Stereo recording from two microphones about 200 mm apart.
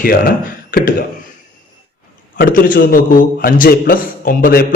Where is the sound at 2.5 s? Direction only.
45° left (ahead or behind).